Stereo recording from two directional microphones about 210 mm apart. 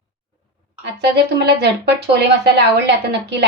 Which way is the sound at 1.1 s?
55° right (ahead or behind).